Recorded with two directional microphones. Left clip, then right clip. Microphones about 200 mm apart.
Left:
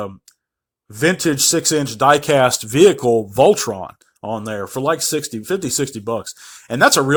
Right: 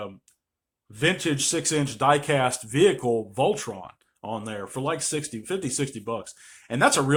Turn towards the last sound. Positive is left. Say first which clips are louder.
# left 8 dB
turn(degrees=40)  # may be behind; listen again after turning